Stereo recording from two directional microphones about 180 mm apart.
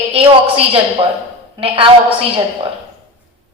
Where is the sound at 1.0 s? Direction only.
30° right (ahead or behind).